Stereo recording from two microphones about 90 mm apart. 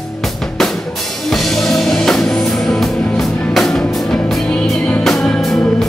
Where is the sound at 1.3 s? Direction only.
5° left (ahead or behind).